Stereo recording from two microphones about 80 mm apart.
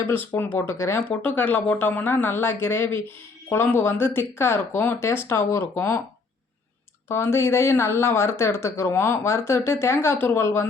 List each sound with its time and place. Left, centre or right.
0.0 s speech: left
1.0 s speech: centre; by 6.0 s left
7.1 s speech: left